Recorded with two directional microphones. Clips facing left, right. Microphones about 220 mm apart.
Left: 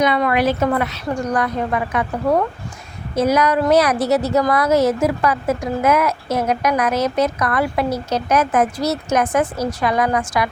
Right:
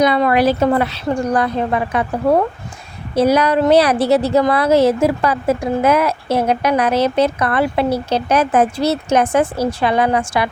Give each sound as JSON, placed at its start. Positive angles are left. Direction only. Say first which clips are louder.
{"t": 0.0, "sound": "a woman's voice", "louder": "right 3 dB", "side_deg": -35}